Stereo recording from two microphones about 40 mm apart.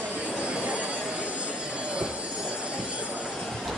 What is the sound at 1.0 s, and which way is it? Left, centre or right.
Train wheels squealing, right.